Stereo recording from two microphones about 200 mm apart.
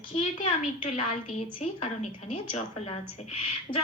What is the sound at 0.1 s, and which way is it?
A woman's voice, 35° left (ahead or behind).